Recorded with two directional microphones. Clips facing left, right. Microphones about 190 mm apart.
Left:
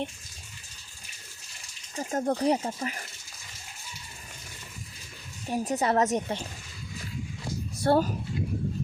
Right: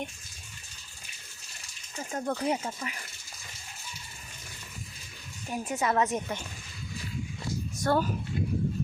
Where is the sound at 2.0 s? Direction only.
35° left (ahead or behind).